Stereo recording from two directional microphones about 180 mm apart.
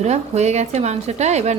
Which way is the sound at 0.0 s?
40° right (ahead or behind).